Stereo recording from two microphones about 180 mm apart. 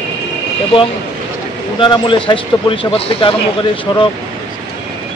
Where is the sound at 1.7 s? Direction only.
30° left (ahead or behind).